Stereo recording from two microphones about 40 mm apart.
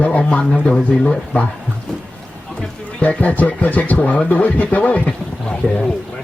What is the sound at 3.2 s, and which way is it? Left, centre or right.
A man's voice, left.